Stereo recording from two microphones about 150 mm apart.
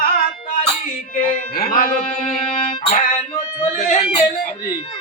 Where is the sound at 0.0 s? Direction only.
70° left (ahead or behind).